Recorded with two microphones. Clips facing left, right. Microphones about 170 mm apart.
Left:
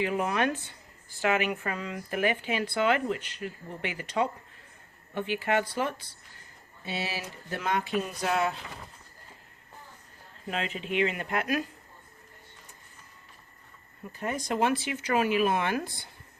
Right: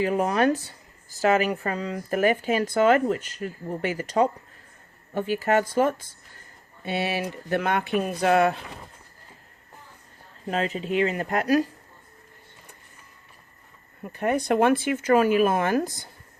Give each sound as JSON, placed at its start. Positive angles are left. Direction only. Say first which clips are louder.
{"t": 0.0, "sound": "speech", "louder": "right 6 dB", "side_deg": -40}
{"t": 6.8, "sound": "speech", "louder": "right 8 dB", "side_deg": -60}
{"t": 10.4, "sound": "speech", "louder": "right 7 dB", "side_deg": -40}
{"t": 14.1, "sound": "speech", "louder": "right 8 dB", "side_deg": -65}